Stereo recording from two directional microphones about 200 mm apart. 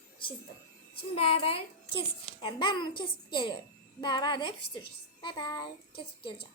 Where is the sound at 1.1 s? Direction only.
30° left (ahead or behind).